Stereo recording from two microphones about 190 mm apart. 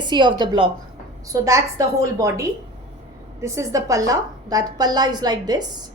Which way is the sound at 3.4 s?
15° right (ahead or behind).